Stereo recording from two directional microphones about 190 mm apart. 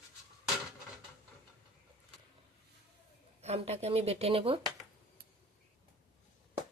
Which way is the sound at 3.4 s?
35° right (ahead or behind).